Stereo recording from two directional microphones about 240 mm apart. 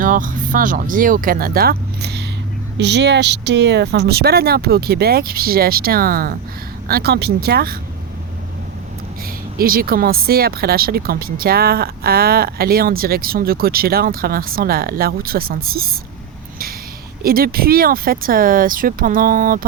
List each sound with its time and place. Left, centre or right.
0.0 s speech: right
9.6 s speech: right
17.2 s speech: right